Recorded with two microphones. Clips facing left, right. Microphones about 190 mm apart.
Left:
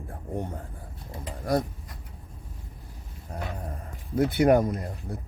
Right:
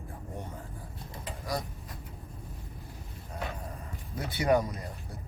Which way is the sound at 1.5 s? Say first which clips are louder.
Left 9 dB; 55° left (ahead or behind).